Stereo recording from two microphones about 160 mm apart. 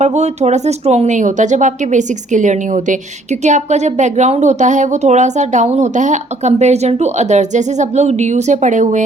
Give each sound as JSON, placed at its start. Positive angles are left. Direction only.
{"t": 0.0, "sound": "a woman's voice", "side_deg": -45}